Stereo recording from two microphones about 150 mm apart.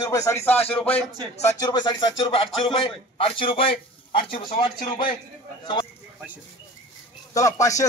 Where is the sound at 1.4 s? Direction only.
20° left (ahead or behind).